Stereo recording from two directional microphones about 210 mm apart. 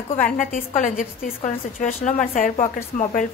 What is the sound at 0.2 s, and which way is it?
A woman's voice, 40° left (ahead or behind).